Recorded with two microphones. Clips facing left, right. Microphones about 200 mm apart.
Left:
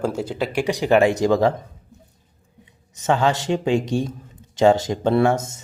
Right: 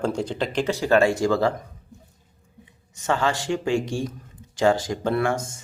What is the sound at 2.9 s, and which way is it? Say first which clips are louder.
Speech: left 4 dB; 20° left (ahead or behind).